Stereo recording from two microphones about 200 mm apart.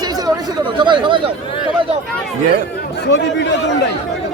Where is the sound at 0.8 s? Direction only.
25° right (ahead or behind).